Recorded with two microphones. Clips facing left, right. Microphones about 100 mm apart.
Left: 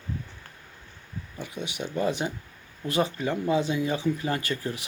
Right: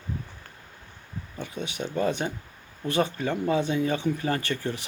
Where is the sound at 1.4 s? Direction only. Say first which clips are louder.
Right 1 dB; 10° left (ahead or behind).